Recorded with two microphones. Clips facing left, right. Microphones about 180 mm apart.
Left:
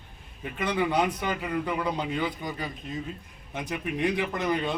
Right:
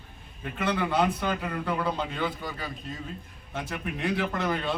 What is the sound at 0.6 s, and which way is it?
A man's voice, 15° left (ahead or behind).